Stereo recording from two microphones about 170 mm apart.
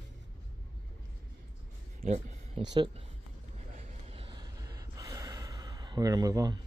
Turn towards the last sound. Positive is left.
turn(degrees=-20)  # may be behind; listen again after turning